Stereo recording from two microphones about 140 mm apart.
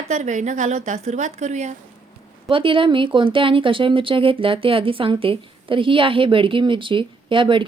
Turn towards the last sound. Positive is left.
turn(degrees=-35)  # may be behind; listen again after turning